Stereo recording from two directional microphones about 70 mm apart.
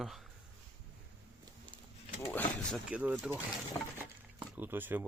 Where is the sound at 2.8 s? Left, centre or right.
Right.